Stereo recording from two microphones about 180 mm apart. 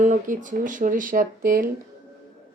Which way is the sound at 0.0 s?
45° right (ahead or behind).